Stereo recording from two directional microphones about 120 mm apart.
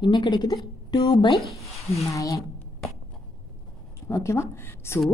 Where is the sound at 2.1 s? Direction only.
25° left (ahead or behind).